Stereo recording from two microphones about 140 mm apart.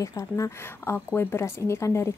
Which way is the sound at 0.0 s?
25° left (ahead or behind).